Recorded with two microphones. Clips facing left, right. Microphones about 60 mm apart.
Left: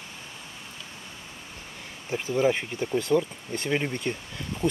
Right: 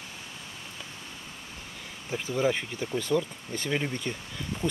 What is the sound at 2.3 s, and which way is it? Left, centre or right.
Speech, centre.